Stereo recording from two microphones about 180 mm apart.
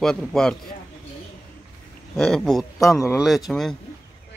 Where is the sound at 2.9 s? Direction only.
15° left (ahead or behind).